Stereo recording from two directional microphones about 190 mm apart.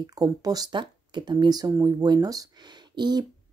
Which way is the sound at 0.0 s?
20° right (ahead or behind).